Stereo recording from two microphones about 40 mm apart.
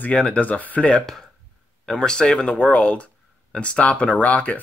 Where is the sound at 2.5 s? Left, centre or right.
Left.